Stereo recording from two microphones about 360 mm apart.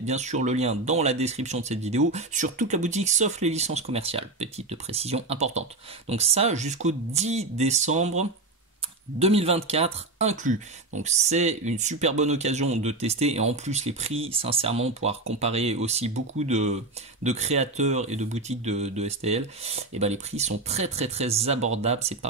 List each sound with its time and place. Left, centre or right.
0.0 s speech: centre
9.2 s speech: centre